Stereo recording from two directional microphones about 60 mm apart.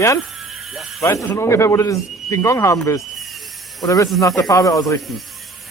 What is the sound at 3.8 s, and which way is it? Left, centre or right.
Speech, left.